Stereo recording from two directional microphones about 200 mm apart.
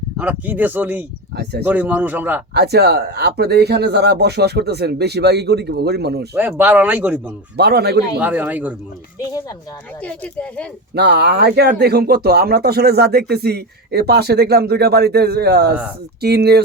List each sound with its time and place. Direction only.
0.2 s speech: 10° right (ahead or behind)
2.5 s speech: 55° right (ahead or behind)
6.3 s speech: 10° right (ahead or behind)
7.5 s speech: 55° right (ahead or behind)
8.2 s speech: 10° right (ahead or behind)
10.0 s speech: 5° left (ahead or behind)
10.9 s speech: 55° right (ahead or behind)